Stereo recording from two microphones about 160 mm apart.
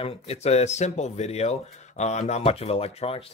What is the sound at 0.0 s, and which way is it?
Speech, 40° left (ahead or behind).